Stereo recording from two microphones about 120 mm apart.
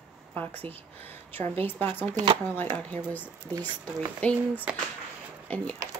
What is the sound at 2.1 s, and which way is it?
Speech, 50° right (ahead or behind).